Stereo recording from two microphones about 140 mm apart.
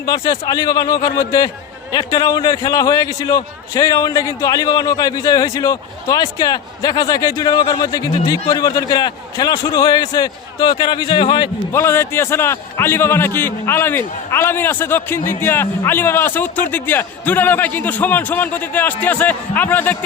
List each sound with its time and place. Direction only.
0.0 s a man's voice: 30° left (ahead or behind)
11.7 s a man's voice: 15° left (ahead or behind)